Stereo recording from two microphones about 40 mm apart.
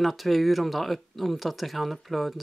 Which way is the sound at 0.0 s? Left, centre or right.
Centre.